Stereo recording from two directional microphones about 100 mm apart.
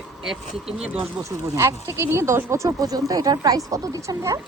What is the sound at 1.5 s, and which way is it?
Speech, 30° right (ahead or behind).